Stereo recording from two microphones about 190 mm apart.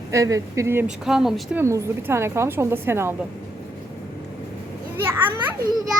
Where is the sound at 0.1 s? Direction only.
15° right (ahead or behind).